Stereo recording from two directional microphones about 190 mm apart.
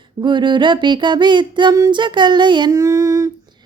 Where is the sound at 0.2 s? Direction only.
25° right (ahead or behind).